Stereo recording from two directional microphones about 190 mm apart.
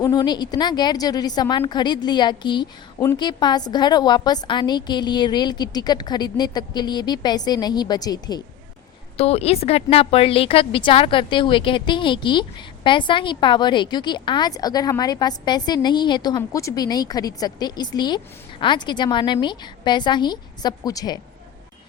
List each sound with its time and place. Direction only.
0.0 s a woman's voice: 20° left (ahead or behind)
9.1 s a woman's voice: 30° left (ahead or behind)